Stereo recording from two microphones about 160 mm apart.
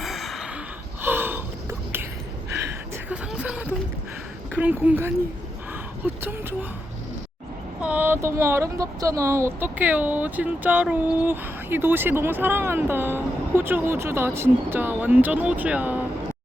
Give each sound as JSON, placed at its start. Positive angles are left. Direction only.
{"t": 0.0, "sound": "gasp", "side_deg": 0}
{"t": 1.0, "sound": "a sound", "side_deg": -15}
{"t": 3.1, "sound": "music", "side_deg": -5}
{"t": 4.5, "sound": "speech", "side_deg": -10}
{"t": 7.8, "sound": "speech", "side_deg": -10}